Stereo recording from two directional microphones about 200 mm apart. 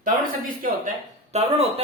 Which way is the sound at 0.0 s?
45° right (ahead or behind).